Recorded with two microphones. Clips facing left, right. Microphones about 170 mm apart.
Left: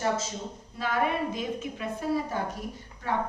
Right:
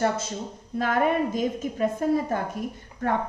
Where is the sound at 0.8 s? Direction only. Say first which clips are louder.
Right 5 dB; 50° right (ahead or behind).